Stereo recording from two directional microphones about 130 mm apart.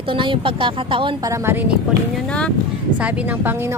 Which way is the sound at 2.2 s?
10° left (ahead or behind).